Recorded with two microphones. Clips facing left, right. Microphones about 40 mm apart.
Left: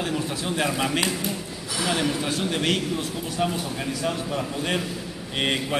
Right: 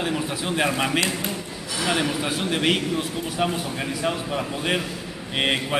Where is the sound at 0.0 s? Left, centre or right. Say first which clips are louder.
Right 1 dB; centre.